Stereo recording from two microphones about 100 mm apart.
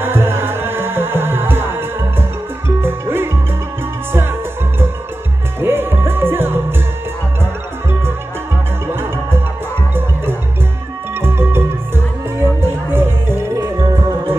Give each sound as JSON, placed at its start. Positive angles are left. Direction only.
{"t": 0.0, "sound": "music", "side_deg": -25}
{"t": 5.6, "sound": "music", "side_deg": -20}
{"t": 11.1, "sound": "music", "side_deg": -20}
{"t": 13.7, "sound": "music", "side_deg": -40}